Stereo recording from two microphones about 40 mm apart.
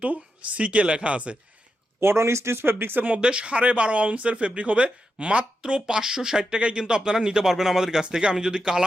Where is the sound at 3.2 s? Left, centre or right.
Right.